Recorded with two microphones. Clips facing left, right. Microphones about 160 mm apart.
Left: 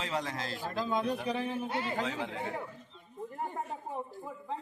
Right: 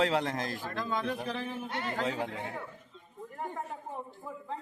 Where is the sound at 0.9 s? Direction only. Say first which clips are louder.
Left 2 dB; 20° left (ahead or behind).